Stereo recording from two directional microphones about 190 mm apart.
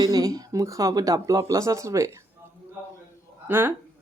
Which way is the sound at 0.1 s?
20° right (ahead or behind).